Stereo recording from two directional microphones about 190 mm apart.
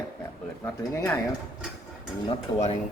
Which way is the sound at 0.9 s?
10° left (ahead or behind).